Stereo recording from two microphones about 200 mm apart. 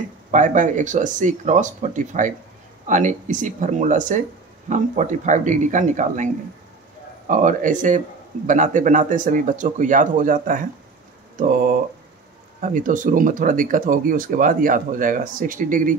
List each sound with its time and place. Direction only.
0.3 s speech: 40° right (ahead or behind)